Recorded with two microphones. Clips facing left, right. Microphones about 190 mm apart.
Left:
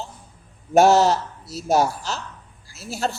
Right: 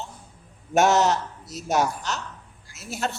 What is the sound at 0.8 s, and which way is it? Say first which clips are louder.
A man's voice: left 4 dB; 35° left (ahead or behind).